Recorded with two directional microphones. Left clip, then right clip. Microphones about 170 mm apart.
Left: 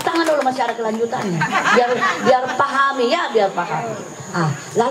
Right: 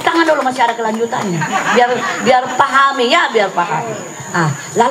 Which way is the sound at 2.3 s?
25° right (ahead or behind).